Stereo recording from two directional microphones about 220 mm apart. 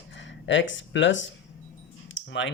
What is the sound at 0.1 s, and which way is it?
Speech, 55° left (ahead or behind).